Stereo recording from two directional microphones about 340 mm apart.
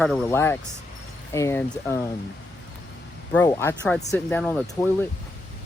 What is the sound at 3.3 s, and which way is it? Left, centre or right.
Speech, centre.